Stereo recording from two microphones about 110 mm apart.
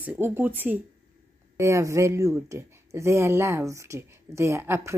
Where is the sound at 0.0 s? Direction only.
15° right (ahead or behind).